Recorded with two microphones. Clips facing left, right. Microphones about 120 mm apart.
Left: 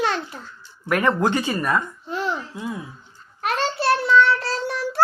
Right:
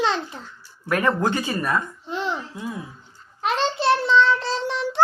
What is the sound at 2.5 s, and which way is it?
Speech, 20° left (ahead or behind).